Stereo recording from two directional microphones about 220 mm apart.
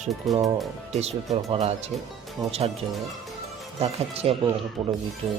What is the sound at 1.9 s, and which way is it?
Speech, centre (ahead or behind).